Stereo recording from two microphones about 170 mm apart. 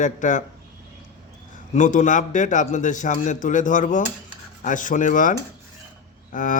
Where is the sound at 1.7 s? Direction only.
45° left (ahead or behind).